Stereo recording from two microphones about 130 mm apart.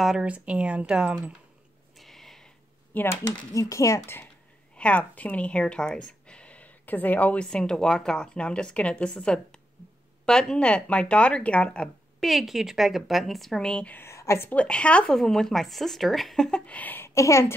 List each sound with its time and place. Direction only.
0.0 s speech: 5° right (ahead or behind)
2.0 s a sound: centre (ahead or behind)
2.9 s speech: 15° left (ahead or behind)
14.5 s speech: 10° left (ahead or behind)